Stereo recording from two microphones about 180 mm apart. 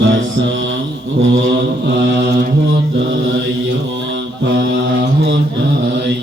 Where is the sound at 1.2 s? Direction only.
85° right.